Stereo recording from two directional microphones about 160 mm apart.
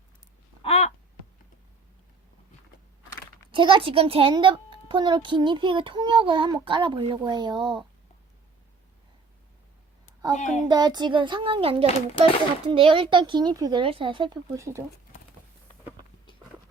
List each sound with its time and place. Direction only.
0.6 s a sound: 40° left (ahead or behind)
3.5 s a woman's voice: 30° right (ahead or behind)
10.3 s speech: 50° left (ahead or behind)
10.7 s a woman's voice: 25° right (ahead or behind)